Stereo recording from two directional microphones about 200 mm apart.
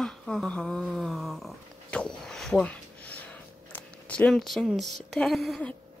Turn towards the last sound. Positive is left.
turn(degrees=0)  # may be behind; listen again after turning